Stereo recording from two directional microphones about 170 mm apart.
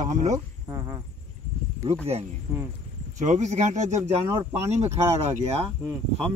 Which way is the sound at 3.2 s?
45° right (ahead or behind).